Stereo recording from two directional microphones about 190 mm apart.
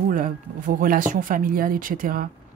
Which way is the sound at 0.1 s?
45° right (ahead or behind).